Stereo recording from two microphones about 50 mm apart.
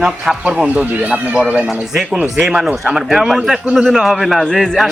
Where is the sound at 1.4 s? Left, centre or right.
Right.